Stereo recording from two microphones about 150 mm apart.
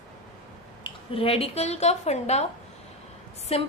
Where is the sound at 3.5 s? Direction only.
40° left (ahead or behind).